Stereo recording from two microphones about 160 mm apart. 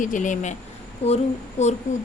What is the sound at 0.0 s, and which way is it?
A woman's voice, 50° left (ahead or behind).